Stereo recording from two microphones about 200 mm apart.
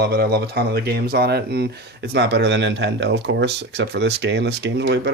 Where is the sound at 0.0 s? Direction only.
50° right (ahead or behind).